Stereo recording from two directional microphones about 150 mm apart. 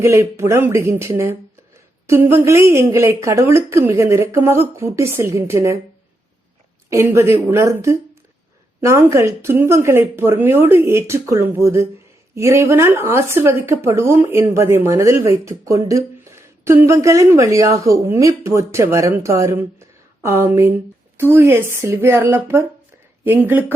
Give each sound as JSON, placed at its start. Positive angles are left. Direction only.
{"t": 0.0, "sound": "a woman's voice", "side_deg": -15}
{"t": 6.9, "sound": "a woman's voice", "side_deg": -20}